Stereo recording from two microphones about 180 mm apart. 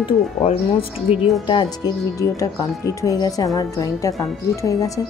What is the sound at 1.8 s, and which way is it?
A woman's voice, 20° left (ahead or behind).